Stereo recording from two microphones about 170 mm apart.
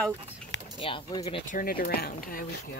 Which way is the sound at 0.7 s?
30° left (ahead or behind).